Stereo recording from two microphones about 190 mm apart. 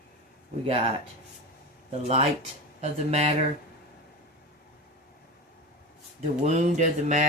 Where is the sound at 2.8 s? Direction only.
35° right (ahead or behind).